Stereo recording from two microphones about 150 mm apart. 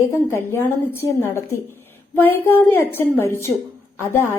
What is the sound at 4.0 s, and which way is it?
Speech, 15° left (ahead or behind).